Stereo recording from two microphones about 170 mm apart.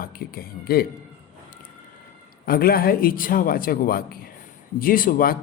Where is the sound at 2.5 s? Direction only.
60° left (ahead or behind).